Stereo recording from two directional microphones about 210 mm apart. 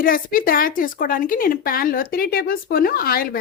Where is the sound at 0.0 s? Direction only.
40° left (ahead or behind).